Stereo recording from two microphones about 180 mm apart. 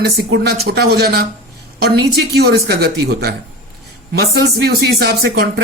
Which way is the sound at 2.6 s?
60° right (ahead or behind).